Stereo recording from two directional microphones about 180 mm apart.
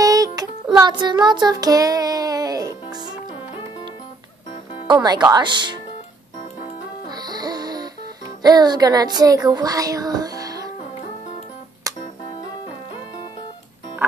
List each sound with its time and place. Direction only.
0.0 s music: 20° right (ahead or behind)
0.7 s child singing: 25° right (ahead or behind)
4.8 s speech: 25° right (ahead or behind)
7.1 s music: 20° right (ahead or behind)
8.4 s speech: 20° right (ahead or behind)
9.5 s music: 20° right (ahead or behind)
11.9 s music: 20° right (ahead or behind)